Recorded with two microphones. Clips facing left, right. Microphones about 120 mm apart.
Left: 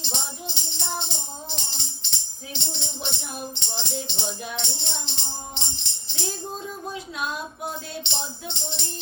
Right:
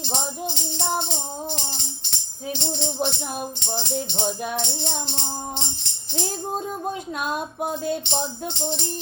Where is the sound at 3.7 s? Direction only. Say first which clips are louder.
Right 7 dB; 50° right (ahead or behind).